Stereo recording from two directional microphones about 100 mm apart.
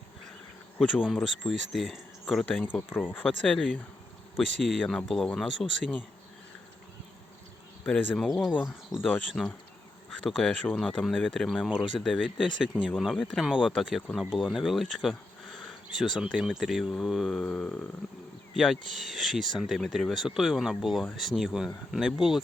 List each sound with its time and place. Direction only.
1.0 s speech: centre (ahead or behind)
2.9 s speech: 20° left (ahead or behind)
3.2 s speech: 10° left (ahead or behind)
4.4 s speech: centre (ahead or behind)
7.9 s speech: 15° left (ahead or behind)
8.9 s speech: 5° right (ahead or behind)
12.4 s speech: 10° right (ahead or behind)